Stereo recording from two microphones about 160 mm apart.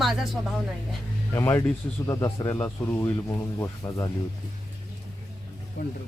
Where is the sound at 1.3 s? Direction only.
15° left (ahead or behind).